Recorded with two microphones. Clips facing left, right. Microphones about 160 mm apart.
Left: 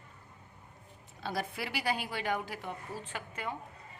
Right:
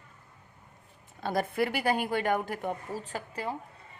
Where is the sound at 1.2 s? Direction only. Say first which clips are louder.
Right 8 dB; 50° right (ahead or behind); by 3.6 s 35° right (ahead or behind).